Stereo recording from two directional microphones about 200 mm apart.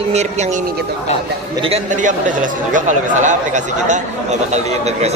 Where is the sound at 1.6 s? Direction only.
35° right (ahead or behind).